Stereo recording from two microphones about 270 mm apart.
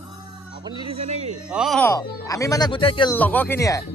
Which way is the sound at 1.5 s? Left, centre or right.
Centre.